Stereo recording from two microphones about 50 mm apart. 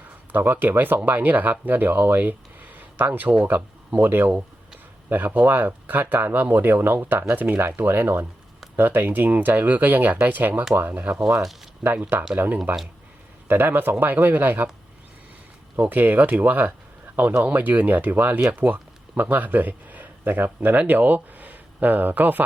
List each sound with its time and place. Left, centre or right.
0.3 s speech: right
4.3 s a sound: right
5.0 s speech: right
13.5 s speech: right
15.8 s speech: right
18.3 s speech: right